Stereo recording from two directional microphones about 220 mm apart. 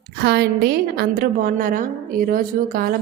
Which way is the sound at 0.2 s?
45° right (ahead or behind).